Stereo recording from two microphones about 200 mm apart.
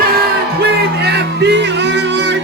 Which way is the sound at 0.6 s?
55° right (ahead or behind).